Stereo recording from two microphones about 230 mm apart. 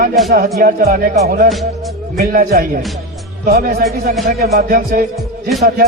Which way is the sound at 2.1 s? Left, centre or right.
Right.